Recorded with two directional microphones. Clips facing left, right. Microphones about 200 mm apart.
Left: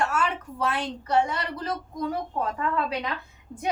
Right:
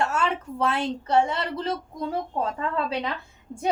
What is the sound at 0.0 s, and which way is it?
Speech, 25° right (ahead or behind).